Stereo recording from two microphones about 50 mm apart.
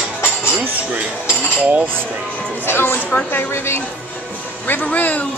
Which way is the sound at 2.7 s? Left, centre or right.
Left.